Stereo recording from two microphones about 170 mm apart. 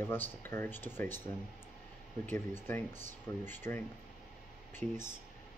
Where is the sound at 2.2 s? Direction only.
15° left (ahead or behind).